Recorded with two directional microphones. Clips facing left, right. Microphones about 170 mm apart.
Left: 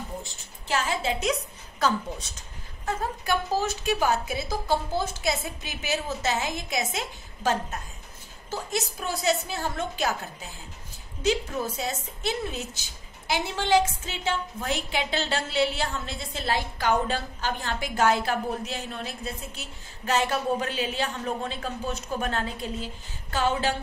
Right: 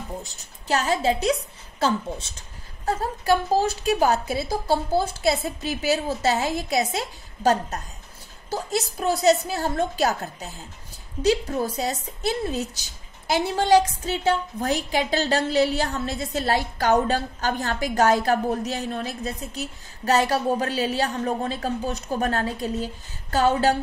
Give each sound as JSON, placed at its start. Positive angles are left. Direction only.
{"t": 0.2, "sound": "a woman's voice", "side_deg": -40}
{"t": 9.0, "sound": "a woman's voice", "side_deg": -40}